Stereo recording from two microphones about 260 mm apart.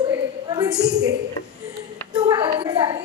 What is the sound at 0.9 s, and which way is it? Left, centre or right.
Speech, right.